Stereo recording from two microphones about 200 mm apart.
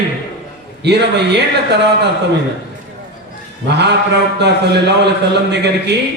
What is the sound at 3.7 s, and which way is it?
A man's voice, 60° right (ahead or behind).